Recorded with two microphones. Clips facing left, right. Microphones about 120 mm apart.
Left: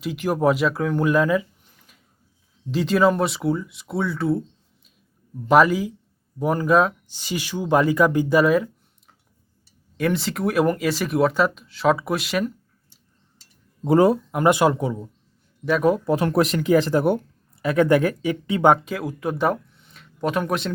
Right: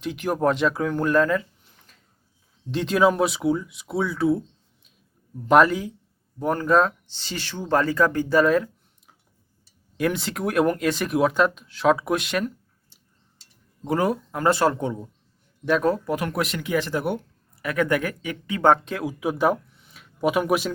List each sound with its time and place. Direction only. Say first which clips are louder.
0.0 s speech: left 2 dB; centre (ahead or behind)
2.7 s speech: left 1 dB; centre (ahead or behind)
13.8 s speech: left 7 dB; 25° left (ahead or behind)
14.3 s speech: left 3 dB; 15° left (ahead or behind)
16.0 s speech: left 6 dB; 30° left (ahead or behind)
17.5 s speech: left 5 dB; 25° left (ahead or behind)
18.6 s speech: left 1 dB; 5° left (ahead or behind)